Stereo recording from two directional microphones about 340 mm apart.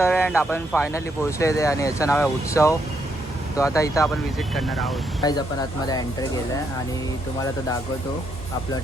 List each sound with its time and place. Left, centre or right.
0.0 s speech: centre
5.2 s speech: centre